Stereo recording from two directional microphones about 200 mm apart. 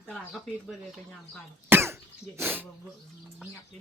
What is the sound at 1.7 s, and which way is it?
Speech, 10° right (ahead or behind).